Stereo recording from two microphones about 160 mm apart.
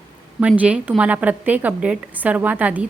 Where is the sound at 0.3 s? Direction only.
10° right (ahead or behind).